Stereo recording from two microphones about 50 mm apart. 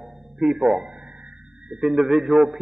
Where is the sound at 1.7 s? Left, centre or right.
Centre.